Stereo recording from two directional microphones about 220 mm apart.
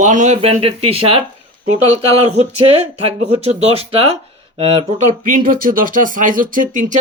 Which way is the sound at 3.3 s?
30° right (ahead or behind).